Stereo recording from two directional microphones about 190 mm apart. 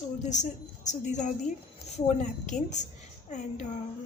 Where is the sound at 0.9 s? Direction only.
40° left (ahead or behind).